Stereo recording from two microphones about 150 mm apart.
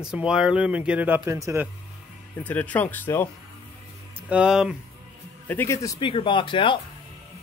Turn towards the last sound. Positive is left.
turn(degrees=35)  # may be behind; listen again after turning